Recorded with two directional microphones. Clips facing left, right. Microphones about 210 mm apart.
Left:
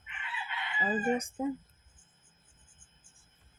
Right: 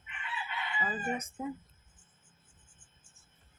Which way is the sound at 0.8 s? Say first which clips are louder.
Left 7 dB; 30° left (ahead or behind).